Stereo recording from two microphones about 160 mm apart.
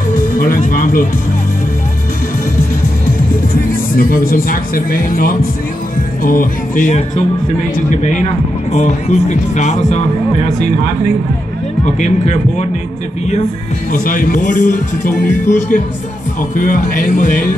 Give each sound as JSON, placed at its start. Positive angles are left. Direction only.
{"t": 0.1, "sound": "music", "side_deg": 60}
{"t": 3.9, "sound": "speech", "side_deg": 65}
{"t": 13.9, "sound": "speech", "side_deg": 55}